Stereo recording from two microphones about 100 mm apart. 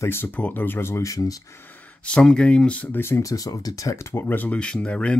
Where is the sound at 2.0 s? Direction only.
10° left (ahead or behind).